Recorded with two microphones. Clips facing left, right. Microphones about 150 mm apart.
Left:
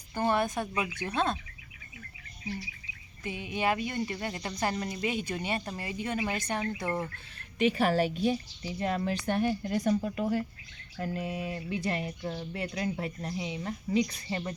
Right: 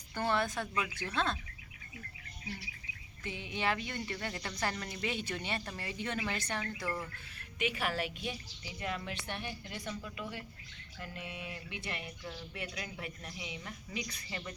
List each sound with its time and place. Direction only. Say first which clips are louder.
0.1 s speech: left 5 dB; 15° left (ahead or behind)
3.2 s speech: left 5 dB; 15° left (ahead or behind); by 14.5 s 30° left (ahead or behind)